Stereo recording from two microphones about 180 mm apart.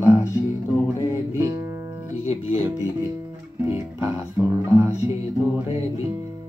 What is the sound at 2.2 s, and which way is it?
Speech, 30° left (ahead or behind).